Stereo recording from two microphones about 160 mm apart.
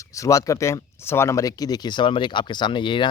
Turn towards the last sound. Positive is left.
turn(degrees=30)  # may be behind; listen again after turning